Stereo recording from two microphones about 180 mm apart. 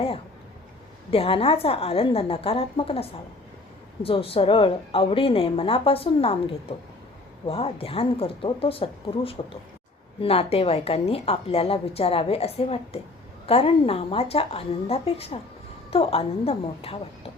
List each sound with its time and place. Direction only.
1.1 s a woman's voice: 30° left (ahead or behind)